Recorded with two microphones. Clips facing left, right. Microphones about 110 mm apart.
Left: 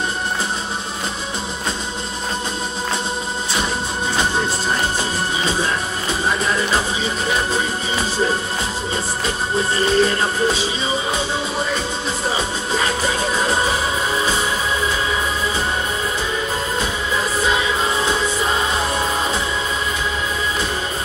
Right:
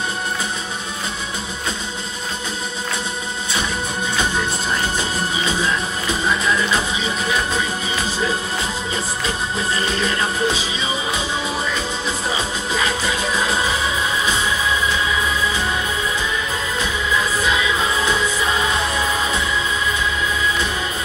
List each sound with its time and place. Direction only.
5.4 s music: 40° left (ahead or behind)
9.9 s music: 35° left (ahead or behind)
12.7 s music: 40° left (ahead or behind)
17.1 s music: 40° left (ahead or behind)